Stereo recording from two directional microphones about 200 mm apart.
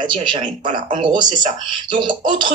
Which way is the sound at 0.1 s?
25° right (ahead or behind).